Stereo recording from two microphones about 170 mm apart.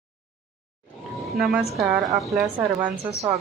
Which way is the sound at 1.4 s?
5° right (ahead or behind).